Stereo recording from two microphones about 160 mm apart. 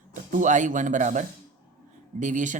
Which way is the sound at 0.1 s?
55° right (ahead or behind).